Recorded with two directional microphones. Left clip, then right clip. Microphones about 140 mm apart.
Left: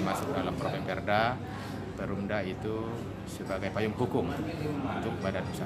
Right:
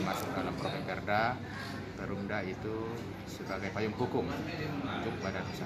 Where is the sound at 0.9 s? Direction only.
15° left (ahead or behind).